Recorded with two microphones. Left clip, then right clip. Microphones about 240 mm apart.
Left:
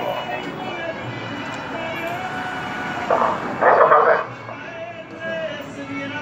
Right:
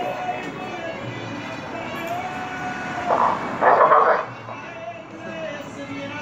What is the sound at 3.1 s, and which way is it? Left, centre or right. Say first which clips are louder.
Vehicle: left 1 dB; right.